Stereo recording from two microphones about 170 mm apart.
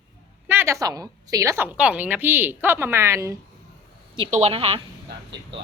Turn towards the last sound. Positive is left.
turn(degrees=-35)  # may be behind; listen again after turning